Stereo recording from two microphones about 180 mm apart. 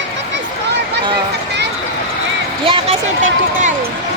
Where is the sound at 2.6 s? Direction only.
30° right (ahead or behind).